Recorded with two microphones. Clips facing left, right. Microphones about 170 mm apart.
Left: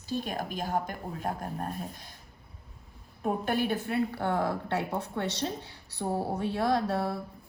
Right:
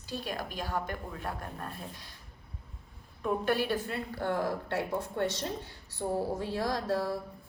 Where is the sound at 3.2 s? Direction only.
50° left (ahead or behind).